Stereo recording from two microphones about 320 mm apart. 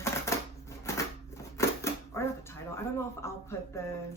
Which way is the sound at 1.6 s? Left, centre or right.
Centre.